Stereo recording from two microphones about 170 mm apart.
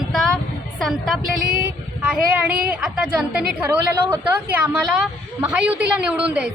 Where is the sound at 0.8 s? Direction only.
Centre (ahead or behind).